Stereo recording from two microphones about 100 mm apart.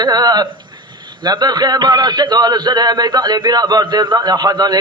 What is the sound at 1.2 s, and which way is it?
A man's voice, 45° right (ahead or behind).